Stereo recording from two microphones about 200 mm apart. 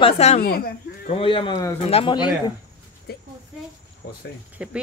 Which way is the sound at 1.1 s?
25° left (ahead or behind).